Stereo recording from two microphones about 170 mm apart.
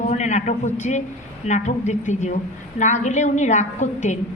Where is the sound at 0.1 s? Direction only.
40° left (ahead or behind).